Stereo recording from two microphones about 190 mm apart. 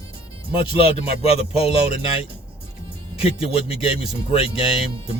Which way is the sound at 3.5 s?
30° left (ahead or behind).